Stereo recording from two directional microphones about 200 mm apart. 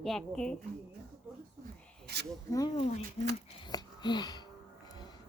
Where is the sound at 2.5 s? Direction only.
20° left (ahead or behind).